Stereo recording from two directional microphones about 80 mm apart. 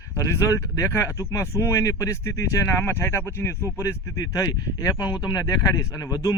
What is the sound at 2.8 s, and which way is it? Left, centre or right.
Speech, left.